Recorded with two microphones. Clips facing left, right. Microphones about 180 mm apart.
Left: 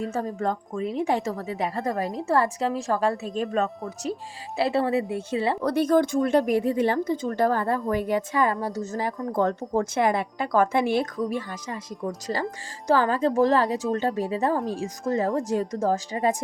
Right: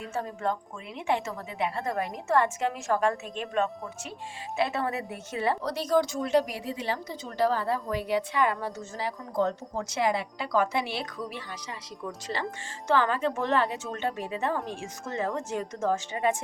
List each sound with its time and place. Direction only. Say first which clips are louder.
0.0 s a woman's voice: left 4 dB; 40° left (ahead or behind)
5.6 s a woman's voice: left 7 dB; 55° left (ahead or behind); by 16.3 s 35° left (ahead or behind)